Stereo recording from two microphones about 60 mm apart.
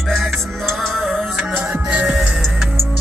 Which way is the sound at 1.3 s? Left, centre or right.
Centre.